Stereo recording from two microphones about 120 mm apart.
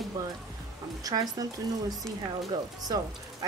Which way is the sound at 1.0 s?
30° right (ahead or behind).